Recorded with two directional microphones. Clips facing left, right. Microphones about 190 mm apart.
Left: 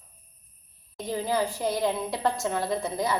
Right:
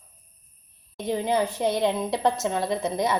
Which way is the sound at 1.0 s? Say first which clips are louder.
Right 3 dB; 20° right (ahead or behind).